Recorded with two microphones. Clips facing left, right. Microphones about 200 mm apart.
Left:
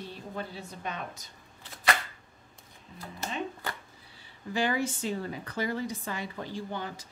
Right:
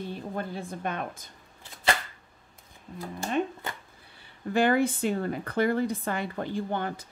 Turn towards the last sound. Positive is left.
turn(degrees=-55)  # may be behind; listen again after turning